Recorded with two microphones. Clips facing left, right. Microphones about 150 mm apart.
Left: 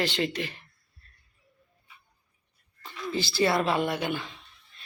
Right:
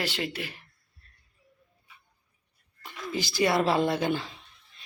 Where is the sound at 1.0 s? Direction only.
15° right (ahead or behind).